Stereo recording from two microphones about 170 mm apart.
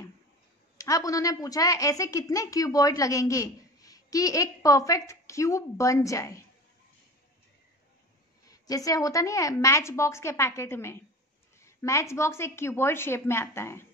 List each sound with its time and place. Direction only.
0.7 s a woman's voice: 20° left (ahead or behind)
8.5 s a woman's voice: 20° left (ahead or behind)